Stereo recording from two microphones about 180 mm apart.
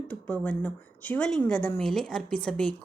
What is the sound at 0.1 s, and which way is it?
Speech, 5° left (ahead or behind).